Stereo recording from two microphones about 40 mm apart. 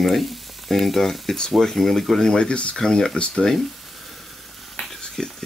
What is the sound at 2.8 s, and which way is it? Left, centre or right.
Speech, centre.